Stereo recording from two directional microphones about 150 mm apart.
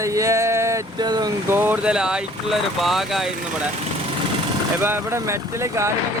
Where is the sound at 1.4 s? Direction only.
15° right (ahead or behind).